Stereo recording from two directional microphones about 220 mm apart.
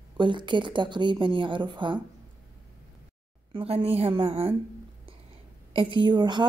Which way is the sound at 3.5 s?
25° right (ahead or behind).